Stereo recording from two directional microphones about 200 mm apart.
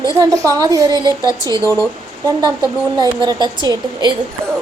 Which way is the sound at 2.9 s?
20° right (ahead or behind).